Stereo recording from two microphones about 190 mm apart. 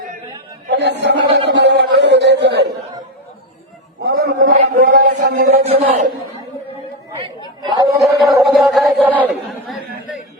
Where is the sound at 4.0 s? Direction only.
60° right (ahead or behind).